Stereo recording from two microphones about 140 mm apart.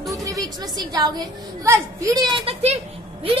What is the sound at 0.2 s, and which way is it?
Music, 25° right (ahead or behind).